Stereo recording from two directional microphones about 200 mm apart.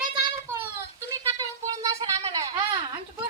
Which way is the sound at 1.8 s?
20° right (ahead or behind).